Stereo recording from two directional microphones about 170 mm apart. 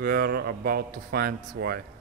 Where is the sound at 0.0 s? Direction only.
65° right (ahead or behind).